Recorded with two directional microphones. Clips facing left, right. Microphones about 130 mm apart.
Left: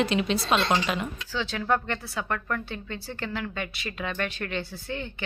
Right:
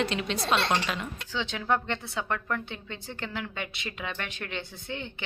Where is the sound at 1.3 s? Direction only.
20° right (ahead or behind).